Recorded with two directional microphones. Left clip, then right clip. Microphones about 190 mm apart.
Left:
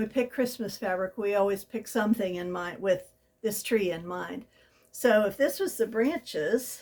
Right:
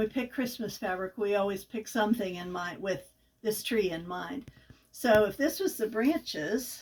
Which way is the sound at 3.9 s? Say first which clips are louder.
Left 2 dB; 35° left (ahead or behind).